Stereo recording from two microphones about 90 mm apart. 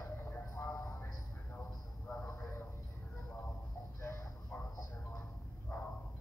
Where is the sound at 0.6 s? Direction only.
35° left (ahead or behind).